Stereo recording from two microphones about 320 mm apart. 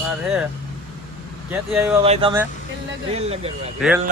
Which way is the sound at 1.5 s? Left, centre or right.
Centre.